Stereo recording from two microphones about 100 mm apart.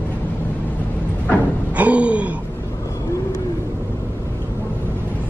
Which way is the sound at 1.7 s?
15° right (ahead or behind).